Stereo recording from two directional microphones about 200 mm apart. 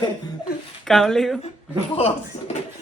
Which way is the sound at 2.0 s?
35° left (ahead or behind).